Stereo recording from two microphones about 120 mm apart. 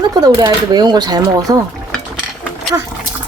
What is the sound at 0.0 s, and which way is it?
Speech, 35° right (ahead or behind).